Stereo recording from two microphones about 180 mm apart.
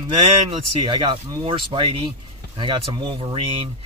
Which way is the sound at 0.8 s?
25° right (ahead or behind).